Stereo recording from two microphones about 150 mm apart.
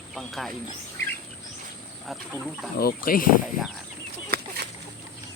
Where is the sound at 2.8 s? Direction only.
75° left (ahead or behind).